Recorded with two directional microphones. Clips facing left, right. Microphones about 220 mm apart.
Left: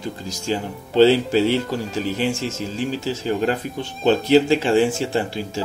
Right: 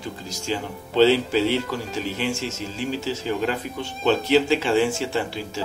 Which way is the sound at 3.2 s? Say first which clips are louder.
Left 5 dB; 40° left (ahead or behind).